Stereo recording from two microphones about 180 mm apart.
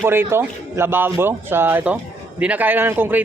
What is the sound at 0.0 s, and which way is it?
A man's voice, 15° right (ahead or behind).